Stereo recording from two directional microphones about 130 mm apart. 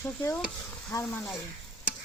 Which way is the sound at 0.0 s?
20° left (ahead or behind).